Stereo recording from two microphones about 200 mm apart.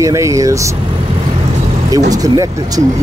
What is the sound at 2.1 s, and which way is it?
Speech, 20° right (ahead or behind).